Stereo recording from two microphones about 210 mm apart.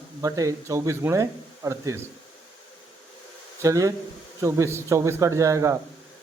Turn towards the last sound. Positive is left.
turn(degrees=-15)  # may be behind; listen again after turning